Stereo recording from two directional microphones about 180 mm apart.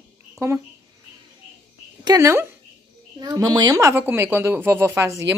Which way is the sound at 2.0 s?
15° right (ahead or behind).